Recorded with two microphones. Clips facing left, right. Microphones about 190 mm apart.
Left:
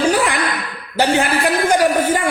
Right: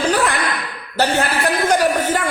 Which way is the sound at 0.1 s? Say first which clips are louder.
Left 1 dB; 10° left (ahead or behind).